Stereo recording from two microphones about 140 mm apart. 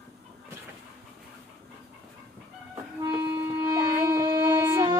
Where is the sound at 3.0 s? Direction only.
30° right (ahead or behind).